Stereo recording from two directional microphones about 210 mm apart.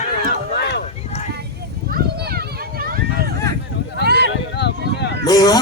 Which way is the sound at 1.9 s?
45° right (ahead or behind).